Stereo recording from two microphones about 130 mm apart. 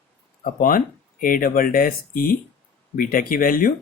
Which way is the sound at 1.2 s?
90° left.